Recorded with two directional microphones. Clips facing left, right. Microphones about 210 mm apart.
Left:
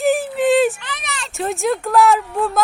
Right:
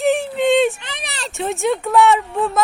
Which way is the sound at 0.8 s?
25° right (ahead or behind).